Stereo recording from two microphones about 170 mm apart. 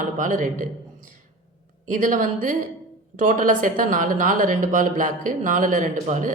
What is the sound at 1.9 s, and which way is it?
Speech, 50° right (ahead or behind).